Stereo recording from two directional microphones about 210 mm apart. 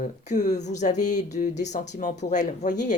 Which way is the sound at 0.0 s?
35° left (ahead or behind).